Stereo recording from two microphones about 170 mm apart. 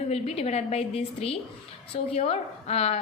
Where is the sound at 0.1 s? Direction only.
40° left (ahead or behind).